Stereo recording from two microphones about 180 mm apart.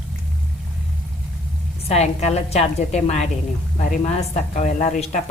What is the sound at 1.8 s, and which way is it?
A woman's voice, 35° left (ahead or behind).